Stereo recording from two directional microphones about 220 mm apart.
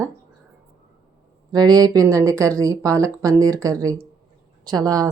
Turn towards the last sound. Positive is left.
turn(degrees=-15)  # may be behind; listen again after turning